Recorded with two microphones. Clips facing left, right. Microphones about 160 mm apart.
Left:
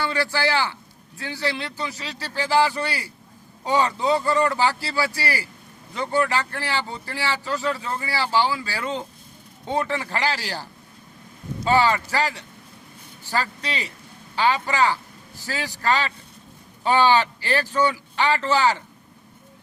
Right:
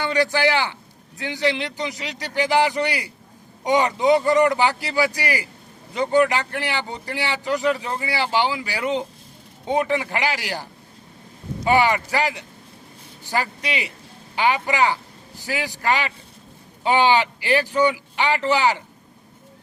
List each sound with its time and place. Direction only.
0.0 s speech: 20° right (ahead or behind)